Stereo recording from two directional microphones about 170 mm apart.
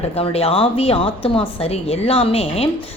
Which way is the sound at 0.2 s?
35° left (ahead or behind).